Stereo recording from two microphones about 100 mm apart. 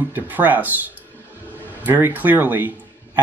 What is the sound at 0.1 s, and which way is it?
Speech, 20° right (ahead or behind).